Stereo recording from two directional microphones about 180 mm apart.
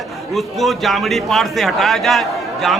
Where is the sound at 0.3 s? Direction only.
Centre (ahead or behind).